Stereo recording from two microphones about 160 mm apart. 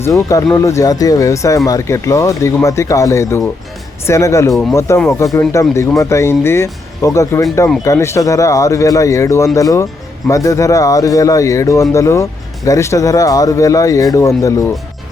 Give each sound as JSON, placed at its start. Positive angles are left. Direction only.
{"t": 0.0, "sound": "speech", "side_deg": 20}